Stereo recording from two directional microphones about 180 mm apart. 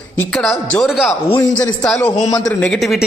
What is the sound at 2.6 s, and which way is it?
Speech, centre (ahead or behind).